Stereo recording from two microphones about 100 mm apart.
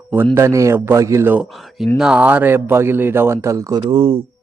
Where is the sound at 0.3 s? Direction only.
30° right (ahead or behind).